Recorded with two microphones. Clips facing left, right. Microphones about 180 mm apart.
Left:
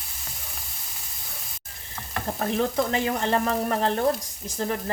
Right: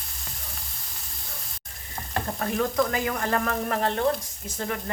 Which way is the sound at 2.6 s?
25° left (ahead or behind).